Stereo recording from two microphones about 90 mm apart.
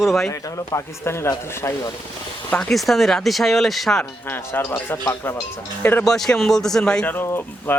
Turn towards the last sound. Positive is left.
turn(degrees=25)  # may be behind; listen again after turning